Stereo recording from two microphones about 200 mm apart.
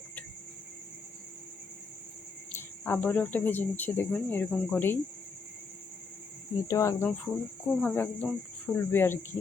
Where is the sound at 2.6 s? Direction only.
10° left (ahead or behind).